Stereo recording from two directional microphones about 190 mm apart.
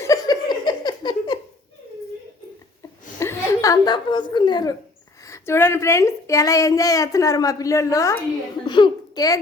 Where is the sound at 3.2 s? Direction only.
15° left (ahead or behind).